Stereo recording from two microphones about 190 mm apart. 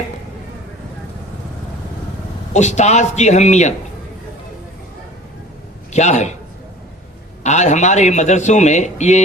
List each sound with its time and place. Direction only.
2.5 s a man's voice: 35° left (ahead or behind)
5.9 s a man's voice: 40° left (ahead or behind)
7.4 s a man's voice: 40° left (ahead or behind)